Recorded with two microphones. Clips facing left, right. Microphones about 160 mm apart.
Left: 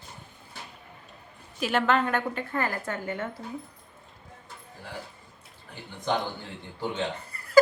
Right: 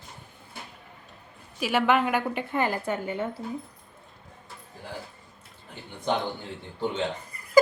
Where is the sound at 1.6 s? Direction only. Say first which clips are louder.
Right 1 dB; 10° right (ahead or behind).